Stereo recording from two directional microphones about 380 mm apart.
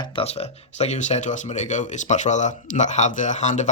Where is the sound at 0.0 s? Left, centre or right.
Centre.